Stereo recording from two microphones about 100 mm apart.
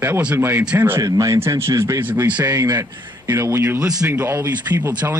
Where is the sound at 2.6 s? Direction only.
30° right (ahead or behind).